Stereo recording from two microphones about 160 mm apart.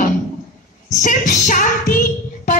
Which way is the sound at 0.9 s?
55° left (ahead or behind).